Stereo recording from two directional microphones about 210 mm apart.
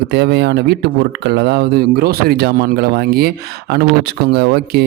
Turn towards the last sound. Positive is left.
turn(degrees=-50)  # may be behind; listen again after turning